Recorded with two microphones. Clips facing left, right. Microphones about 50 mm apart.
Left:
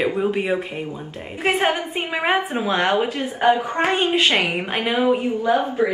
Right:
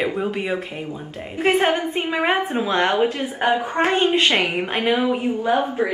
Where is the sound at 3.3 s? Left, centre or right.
Right.